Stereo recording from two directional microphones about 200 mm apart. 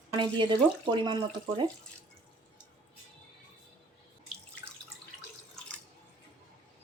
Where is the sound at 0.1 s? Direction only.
25° right (ahead or behind).